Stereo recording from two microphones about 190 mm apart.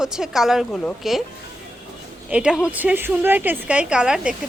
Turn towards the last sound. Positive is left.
turn(degrees=-5)  # may be behind; listen again after turning